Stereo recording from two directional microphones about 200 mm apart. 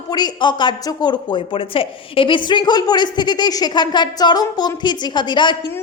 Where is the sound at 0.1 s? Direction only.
20° left (ahead or behind).